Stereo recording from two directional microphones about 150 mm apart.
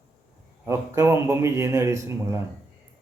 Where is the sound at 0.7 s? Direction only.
15° right (ahead or behind).